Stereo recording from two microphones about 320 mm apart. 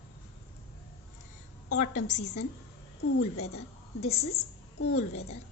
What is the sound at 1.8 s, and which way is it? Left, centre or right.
A woman's voice, left.